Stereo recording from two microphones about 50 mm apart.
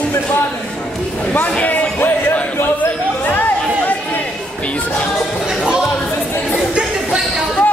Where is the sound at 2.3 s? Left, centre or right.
Left.